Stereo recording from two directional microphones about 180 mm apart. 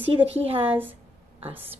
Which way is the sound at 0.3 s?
35° right (ahead or behind).